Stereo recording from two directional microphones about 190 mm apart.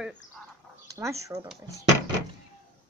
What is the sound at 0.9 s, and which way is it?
Speech, 15° right (ahead or behind).